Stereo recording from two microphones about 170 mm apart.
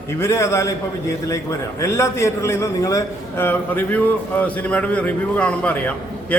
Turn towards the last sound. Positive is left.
turn(degrees=10)  # may be behind; listen again after turning